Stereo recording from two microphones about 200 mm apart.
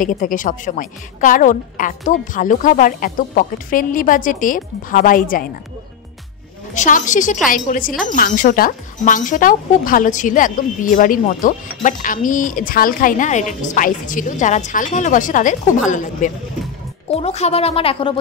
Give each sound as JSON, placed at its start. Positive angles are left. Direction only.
{"t": 0.0, "sound": "a woman's voice", "side_deg": 45}
{"t": 6.7, "sound": "a woman's voice", "side_deg": 40}